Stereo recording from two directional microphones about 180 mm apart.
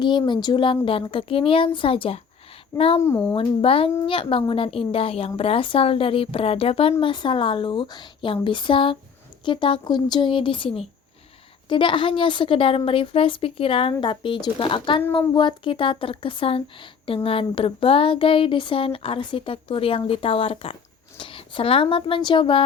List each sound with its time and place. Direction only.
0.0 s a woman's voice: 25° left (ahead or behind)
3.0 s speech: 10° left (ahead or behind)
3.3 s a woman's voice: 30° left (ahead or behind)